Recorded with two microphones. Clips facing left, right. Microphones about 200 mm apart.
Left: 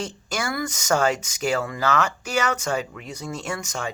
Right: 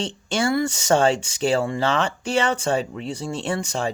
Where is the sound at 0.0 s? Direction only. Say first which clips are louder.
Right 5 dB; 30° right (ahead or behind).